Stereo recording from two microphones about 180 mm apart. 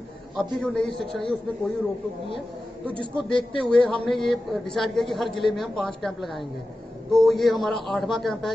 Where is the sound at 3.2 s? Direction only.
30° left (ahead or behind).